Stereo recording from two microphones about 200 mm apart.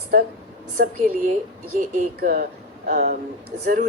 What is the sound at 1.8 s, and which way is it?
Speech, 40° right (ahead or behind).